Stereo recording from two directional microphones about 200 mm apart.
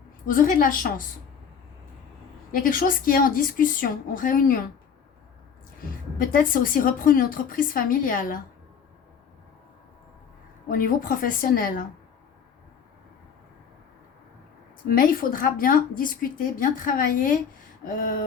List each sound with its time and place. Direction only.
0.3 s speech: 40° left (ahead or behind)
2.5 s speech: 45° left (ahead or behind)
6.1 s speech: 45° left (ahead or behind)
10.7 s speech: 45° left (ahead or behind)
14.8 s speech: 45° left (ahead or behind)